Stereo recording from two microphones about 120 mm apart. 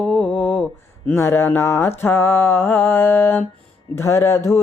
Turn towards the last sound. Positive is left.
turn(degrees=25)  # may be behind; listen again after turning